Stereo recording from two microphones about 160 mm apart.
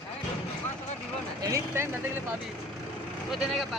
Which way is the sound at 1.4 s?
20° right (ahead or behind).